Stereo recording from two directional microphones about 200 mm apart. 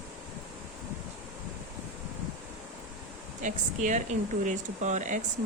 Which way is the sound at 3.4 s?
40° right (ahead or behind).